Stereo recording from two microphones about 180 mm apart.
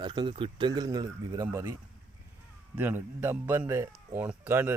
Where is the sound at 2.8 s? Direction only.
10° right (ahead or behind).